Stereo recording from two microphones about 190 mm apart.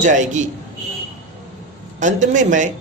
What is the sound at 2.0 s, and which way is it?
Speech, 40° right (ahead or behind).